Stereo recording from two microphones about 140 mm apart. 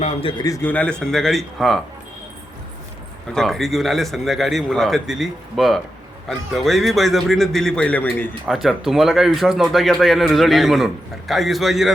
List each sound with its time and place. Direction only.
0.0 s a man's voice: 40° left (ahead or behind)
0.4 s a man's voice: 25° left (ahead or behind)
0.7 s speech: 10° left (ahead or behind)
3.3 s speech: centre (ahead or behind)
8.4 s speech: centre (ahead or behind)